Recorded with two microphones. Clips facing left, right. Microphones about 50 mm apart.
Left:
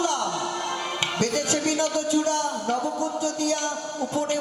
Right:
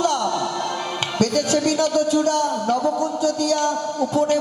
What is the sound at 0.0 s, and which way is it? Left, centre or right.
Music, left.